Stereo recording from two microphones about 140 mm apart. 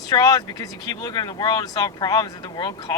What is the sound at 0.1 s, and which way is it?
Speech, 30° left (ahead or behind).